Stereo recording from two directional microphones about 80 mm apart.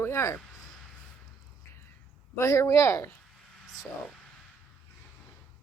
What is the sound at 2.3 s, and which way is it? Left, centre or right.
Speech, left.